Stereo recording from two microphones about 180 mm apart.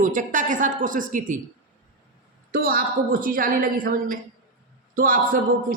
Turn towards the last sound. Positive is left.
turn(degrees=-50)  # may be behind; listen again after turning